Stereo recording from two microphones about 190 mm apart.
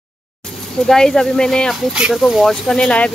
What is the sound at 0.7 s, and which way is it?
Speech, 5° left (ahead or behind).